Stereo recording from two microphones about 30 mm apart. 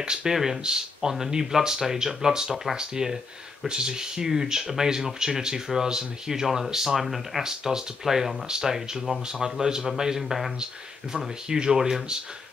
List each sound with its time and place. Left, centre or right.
0.0 s speech: right
0.3 s speech: centre